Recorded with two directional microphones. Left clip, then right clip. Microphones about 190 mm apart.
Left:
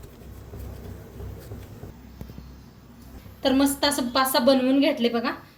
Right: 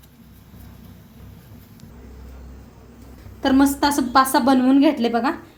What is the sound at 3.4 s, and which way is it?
A woman's voice, 30° right (ahead or behind).